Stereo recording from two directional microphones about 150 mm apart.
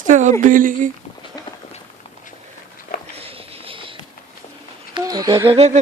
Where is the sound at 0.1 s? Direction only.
55° right (ahead or behind).